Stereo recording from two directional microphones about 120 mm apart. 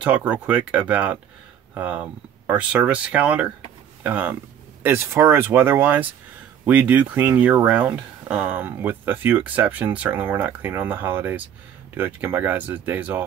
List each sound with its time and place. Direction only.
0.0 s speech: 10° right (ahead or behind)